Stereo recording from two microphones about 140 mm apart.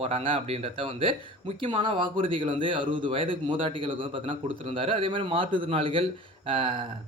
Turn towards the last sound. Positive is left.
turn(degrees=-40)  # may be behind; listen again after turning